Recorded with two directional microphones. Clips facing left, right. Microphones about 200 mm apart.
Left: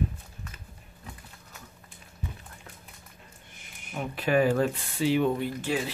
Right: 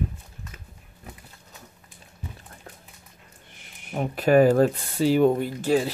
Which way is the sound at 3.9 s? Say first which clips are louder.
Right 7 dB; 40° right (ahead or behind).